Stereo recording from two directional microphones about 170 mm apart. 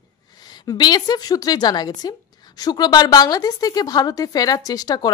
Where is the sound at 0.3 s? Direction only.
25° left (ahead or behind).